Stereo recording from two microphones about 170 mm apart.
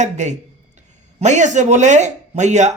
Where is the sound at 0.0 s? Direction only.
45° right (ahead or behind).